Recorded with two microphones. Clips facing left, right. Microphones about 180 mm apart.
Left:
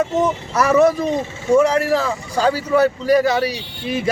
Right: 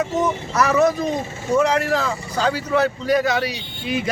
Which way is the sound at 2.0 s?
30° left (ahead or behind).